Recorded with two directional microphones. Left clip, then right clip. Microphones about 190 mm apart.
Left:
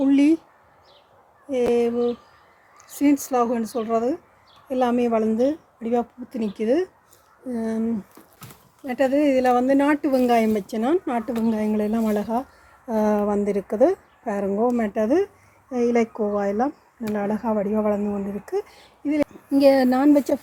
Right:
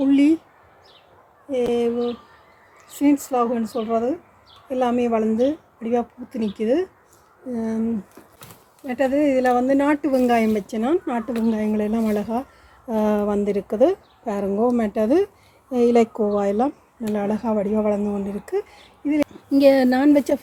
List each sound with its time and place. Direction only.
0.0 s speech: 25° left (ahead or behind)
3.0 s speech: 30° left (ahead or behind)
8.9 s speech: 25° left (ahead or behind)
19.2 s speech: 10° left (ahead or behind)